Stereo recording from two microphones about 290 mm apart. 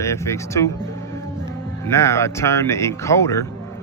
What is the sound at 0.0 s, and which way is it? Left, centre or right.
Speech, centre.